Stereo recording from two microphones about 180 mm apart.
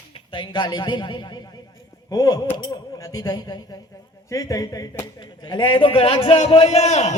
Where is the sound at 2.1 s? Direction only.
20° left (ahead or behind).